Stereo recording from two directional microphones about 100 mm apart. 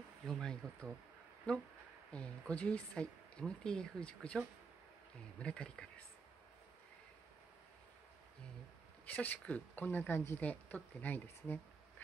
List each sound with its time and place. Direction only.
0.3 s speech: 5° left (ahead or behind)
5.4 s speech: 10° left (ahead or behind)
9.0 s speech: 15° left (ahead or behind)